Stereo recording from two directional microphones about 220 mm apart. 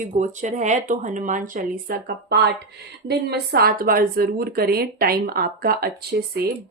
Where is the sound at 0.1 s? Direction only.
35° right (ahead or behind).